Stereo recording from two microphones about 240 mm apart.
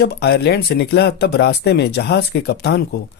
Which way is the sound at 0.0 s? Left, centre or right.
Left.